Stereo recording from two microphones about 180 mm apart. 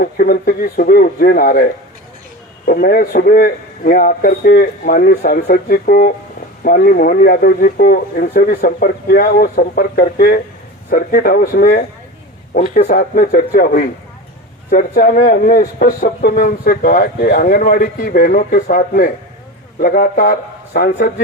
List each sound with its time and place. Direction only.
0.0 s a man's voice: 55° left (ahead or behind)
2.6 s a man's voice: 55° left (ahead or behind)
12.5 s a man's voice: 45° left (ahead or behind)